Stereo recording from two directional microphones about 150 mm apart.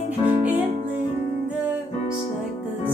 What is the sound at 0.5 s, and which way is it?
Music, 10° right (ahead or behind).